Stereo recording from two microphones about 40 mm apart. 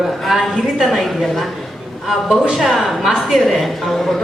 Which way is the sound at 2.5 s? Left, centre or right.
Centre.